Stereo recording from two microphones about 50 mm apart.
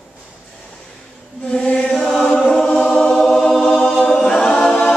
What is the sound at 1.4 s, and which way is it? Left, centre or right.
Chant, left.